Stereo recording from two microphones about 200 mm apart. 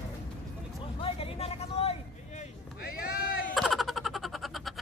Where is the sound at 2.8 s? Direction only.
50° left (ahead or behind).